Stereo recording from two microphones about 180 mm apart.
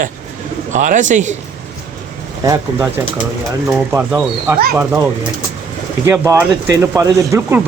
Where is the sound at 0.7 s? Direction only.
45° right (ahead or behind).